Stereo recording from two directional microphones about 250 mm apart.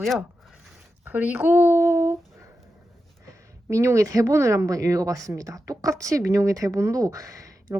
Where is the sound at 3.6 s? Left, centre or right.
Centre.